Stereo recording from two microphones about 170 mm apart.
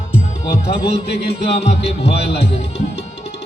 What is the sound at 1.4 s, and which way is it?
Music, 35° left (ahead or behind).